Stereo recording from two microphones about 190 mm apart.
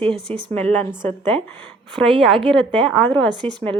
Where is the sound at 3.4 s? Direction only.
10° left (ahead or behind).